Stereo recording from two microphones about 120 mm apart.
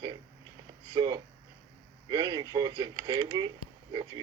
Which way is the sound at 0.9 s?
35° right (ahead or behind).